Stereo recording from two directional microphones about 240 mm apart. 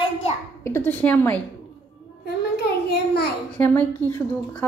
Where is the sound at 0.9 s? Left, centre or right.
Centre.